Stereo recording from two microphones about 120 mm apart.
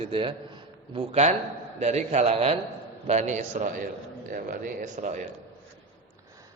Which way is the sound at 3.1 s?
80° right.